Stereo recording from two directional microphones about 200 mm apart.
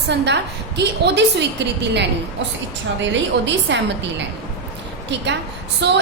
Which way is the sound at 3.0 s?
65° right (ahead or behind).